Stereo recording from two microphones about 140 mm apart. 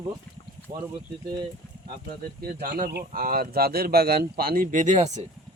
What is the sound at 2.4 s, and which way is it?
Speech, 90° right.